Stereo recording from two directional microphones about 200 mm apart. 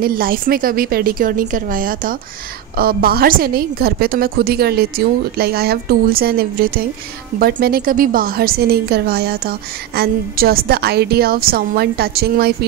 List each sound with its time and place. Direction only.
0.0 s a woman's voice: 45° right (ahead or behind)